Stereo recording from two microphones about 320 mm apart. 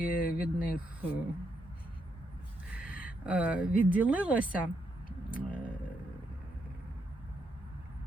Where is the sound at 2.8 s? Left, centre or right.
Centre.